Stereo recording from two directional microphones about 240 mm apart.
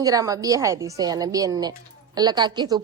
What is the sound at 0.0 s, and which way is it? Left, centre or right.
A woman's voice, centre.